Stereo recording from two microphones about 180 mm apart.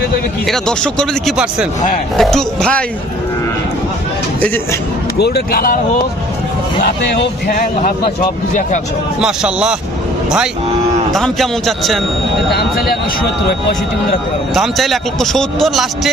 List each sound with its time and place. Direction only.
0.4 s speech: 5° left (ahead or behind)
4.4 s a man's voice: 10° left (ahead or behind)
5.2 s speech: 60° left (ahead or behind)
6.8 s speech: 60° left (ahead or behind)
9.2 s speech: 5° right (ahead or behind)
11.1 s speech: centre (ahead or behind)
14.5 s speech: centre (ahead or behind)